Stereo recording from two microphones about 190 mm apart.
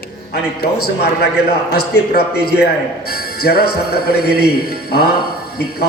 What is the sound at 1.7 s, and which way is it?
Speech, 60° left (ahead or behind).